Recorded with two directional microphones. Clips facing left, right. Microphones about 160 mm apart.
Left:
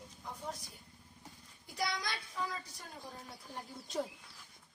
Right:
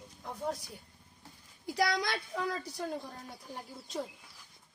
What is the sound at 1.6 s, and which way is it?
Speech, 80° right.